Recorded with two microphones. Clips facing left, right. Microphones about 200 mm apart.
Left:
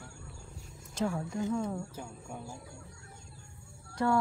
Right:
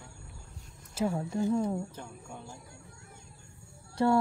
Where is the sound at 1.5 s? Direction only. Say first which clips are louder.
Right 5 dB; 20° right (ahead or behind).